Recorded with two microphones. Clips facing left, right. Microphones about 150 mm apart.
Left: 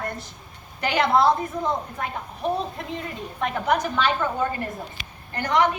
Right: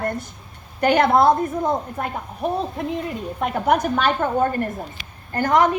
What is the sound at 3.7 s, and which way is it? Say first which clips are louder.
A woman's voice: right 4 dB; 50° right (ahead or behind).